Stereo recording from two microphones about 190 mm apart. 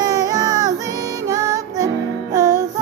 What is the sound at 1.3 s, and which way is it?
Music, 20° right (ahead or behind).